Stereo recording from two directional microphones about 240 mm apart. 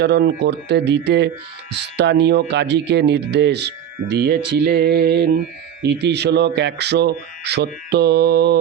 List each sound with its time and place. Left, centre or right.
0.0 s speech: right